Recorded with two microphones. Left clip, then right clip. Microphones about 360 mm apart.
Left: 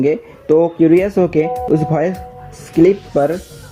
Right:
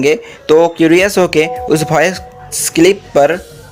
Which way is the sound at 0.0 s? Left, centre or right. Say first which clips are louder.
Right 4 dB; right.